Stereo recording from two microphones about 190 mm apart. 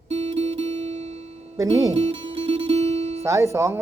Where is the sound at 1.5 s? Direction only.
20° right (ahead or behind).